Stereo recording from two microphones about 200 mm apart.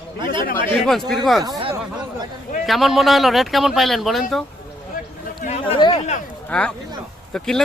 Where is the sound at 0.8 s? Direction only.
Centre (ahead or behind).